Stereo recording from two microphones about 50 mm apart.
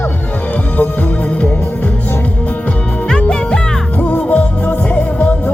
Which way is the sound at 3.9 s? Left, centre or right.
Left.